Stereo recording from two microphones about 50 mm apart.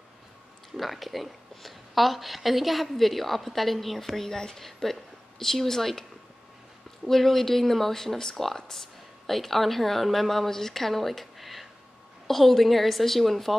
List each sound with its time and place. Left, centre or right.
0.7 s speech: centre
7.1 s speech: centre